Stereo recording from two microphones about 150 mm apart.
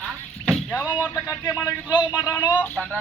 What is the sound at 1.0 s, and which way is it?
Speech, 15° left (ahead or behind).